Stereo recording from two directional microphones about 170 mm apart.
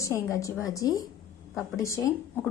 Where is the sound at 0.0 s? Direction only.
15° left (ahead or behind).